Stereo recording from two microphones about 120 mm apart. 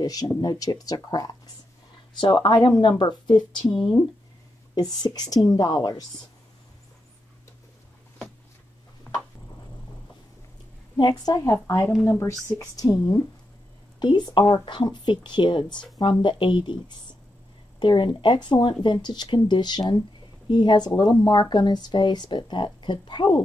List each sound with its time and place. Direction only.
0.0 s a woman's voice: 30° left (ahead or behind)
4.7 s a woman's voice: 35° left (ahead or behind)
9.1 s a sound: 20° left (ahead or behind)
11.0 s a woman's voice: 35° left (ahead or behind)